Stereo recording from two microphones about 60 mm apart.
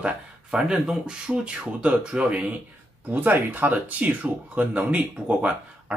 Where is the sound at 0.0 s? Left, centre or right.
Centre.